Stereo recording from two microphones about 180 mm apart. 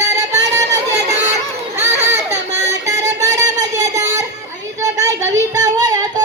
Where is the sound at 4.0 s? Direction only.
20° right (ahead or behind).